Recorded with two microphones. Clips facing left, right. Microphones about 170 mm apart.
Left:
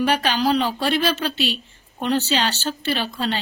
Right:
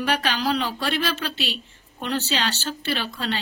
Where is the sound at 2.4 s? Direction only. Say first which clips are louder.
Left 3 dB; 40° left (ahead or behind).